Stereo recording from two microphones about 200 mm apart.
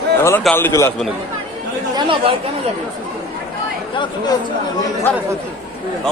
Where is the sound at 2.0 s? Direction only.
25° right (ahead or behind).